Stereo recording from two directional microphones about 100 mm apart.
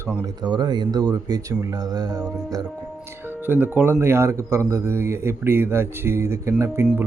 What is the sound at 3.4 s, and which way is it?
Speech, 15° right (ahead or behind).